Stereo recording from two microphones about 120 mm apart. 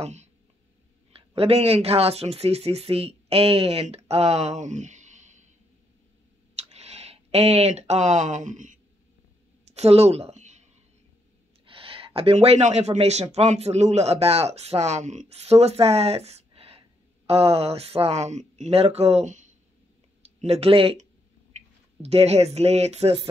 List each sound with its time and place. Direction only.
0.0 s speech: 70° right (ahead or behind)
1.1 s speech: 55° right (ahead or behind); by 5.5 s 80° right
6.7 s speech: 65° right (ahead or behind); by 8.7 s 90° right
9.8 s speech: 60° right (ahead or behind); by 10.7 s 75° right (ahead or behind)
11.6 s speech: 50° right (ahead or behind); by 19.5 s 80° right
20.3 s speech: 60° right (ahead or behind)
22.0 s speech: 60° right (ahead or behind)